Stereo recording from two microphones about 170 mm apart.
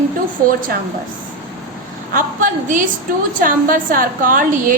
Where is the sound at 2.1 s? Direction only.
50° right (ahead or behind).